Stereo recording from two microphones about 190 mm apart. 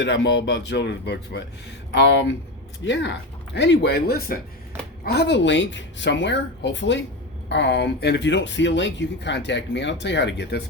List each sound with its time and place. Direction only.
0.0 s speech: 70° left (ahead or behind)